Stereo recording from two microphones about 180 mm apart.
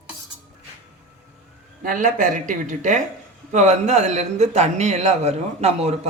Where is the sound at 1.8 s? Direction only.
50° right (ahead or behind).